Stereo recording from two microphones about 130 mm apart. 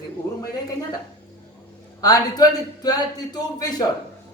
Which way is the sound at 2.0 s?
30° left (ahead or behind).